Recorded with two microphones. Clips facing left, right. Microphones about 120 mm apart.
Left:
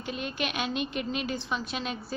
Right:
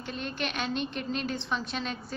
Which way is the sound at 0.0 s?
10° left (ahead or behind).